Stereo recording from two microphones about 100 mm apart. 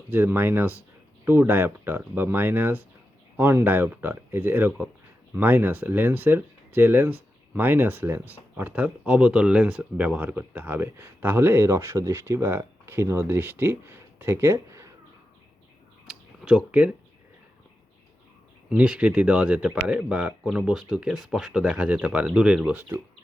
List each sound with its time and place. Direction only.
0.1 s speech: 20° right (ahead or behind)
16.4 s speech: 10° right (ahead or behind)
18.7 s speech: 10° right (ahead or behind)